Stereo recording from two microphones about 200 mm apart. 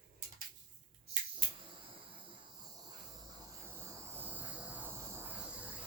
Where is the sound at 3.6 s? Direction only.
10° right (ahead or behind).